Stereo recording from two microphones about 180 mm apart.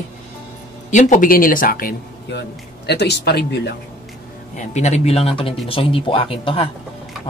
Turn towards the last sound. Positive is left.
turn(degrees=30)  # may be behind; listen again after turning